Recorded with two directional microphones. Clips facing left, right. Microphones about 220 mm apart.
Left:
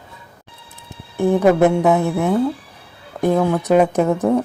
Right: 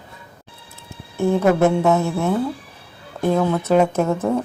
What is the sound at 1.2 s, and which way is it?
A woman's voice, 15° left (ahead or behind).